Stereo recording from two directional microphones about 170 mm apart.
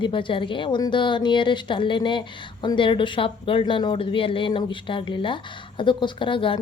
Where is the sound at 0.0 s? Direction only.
30° left (ahead or behind).